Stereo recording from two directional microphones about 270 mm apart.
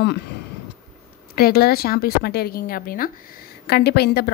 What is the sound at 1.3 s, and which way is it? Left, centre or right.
Speech, left.